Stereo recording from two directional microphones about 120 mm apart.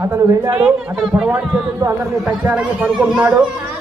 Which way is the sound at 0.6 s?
5° right (ahead or behind).